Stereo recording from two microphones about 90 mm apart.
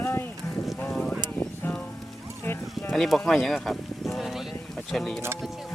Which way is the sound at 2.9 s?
Centre (ahead or behind).